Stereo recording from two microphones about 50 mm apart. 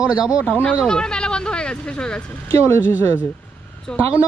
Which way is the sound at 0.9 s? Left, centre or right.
Centre.